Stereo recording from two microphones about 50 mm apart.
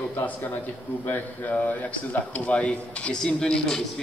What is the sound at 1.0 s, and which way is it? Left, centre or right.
Speech, left.